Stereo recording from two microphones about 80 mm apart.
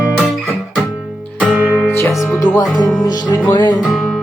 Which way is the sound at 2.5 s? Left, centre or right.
Left.